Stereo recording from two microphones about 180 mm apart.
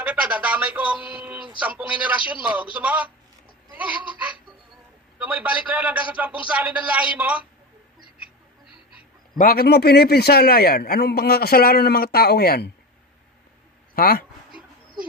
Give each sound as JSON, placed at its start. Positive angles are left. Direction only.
{"t": 0.0, "sound": "speech", "side_deg": -5}
{"t": 1.1, "sound": "a sound", "side_deg": -5}
{"t": 2.0, "sound": "a man's voice", "side_deg": -5}
{"t": 5.2, "sound": "a man's voice", "side_deg": -10}
{"t": 9.4, "sound": "a man's voice", "side_deg": 55}
{"t": 13.9, "sound": "speech", "side_deg": 55}